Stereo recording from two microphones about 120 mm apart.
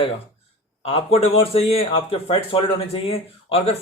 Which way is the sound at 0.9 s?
55° left (ahead or behind).